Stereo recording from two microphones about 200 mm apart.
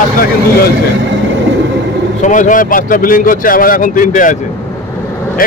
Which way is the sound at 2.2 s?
40° left (ahead or behind).